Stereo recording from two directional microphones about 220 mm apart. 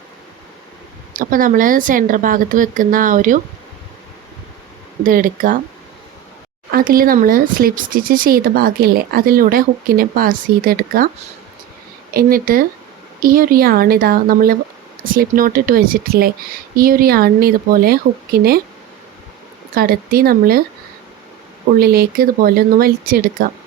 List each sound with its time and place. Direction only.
1.1 s speech: 40° right (ahead or behind)
5.0 s speech: 40° right (ahead or behind)
6.7 s speech: 40° right (ahead or behind)
12.1 s speech: 40° right (ahead or behind)
19.7 s speech: 40° right (ahead or behind)
21.8 s speech: 45° right (ahead or behind)